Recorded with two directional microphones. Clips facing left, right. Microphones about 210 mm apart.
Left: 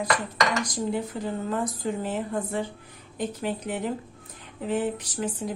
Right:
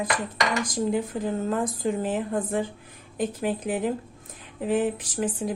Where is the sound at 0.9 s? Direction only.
50° right (ahead or behind).